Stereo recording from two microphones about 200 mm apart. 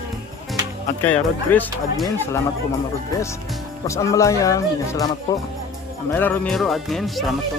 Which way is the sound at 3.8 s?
15° left (ahead or behind).